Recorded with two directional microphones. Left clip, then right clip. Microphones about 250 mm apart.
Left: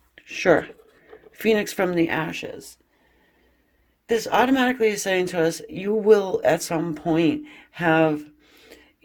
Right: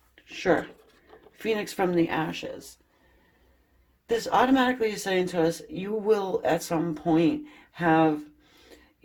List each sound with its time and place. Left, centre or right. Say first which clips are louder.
0.2 s whispering: left 6 dB; left
1.3 s speech: left 7 dB; left
4.0 s speech: left 3 dB; left